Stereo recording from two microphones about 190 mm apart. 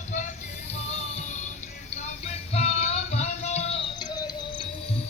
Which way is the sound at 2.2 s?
35° left (ahead or behind).